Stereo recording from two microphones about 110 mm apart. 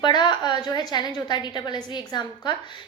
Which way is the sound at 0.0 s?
40° left (ahead or behind).